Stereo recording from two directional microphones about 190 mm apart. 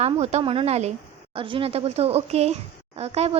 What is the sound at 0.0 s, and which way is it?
Speech, 35° right (ahead or behind).